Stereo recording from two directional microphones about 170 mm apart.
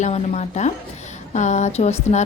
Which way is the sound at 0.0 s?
40° left (ahead or behind).